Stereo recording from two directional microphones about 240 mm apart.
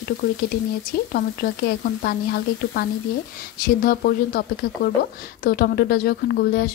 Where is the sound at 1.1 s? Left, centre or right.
Left.